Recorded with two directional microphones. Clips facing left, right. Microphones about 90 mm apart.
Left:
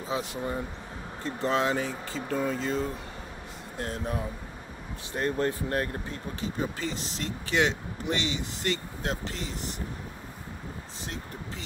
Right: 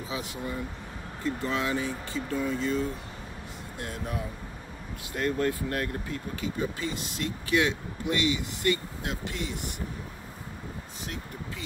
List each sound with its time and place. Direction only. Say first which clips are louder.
0.1 s speech: left 4 dB; 35° left (ahead or behind)